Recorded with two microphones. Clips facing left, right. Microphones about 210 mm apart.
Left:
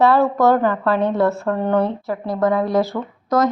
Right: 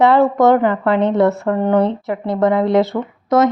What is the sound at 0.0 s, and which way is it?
A woman's voice, 20° right (ahead or behind).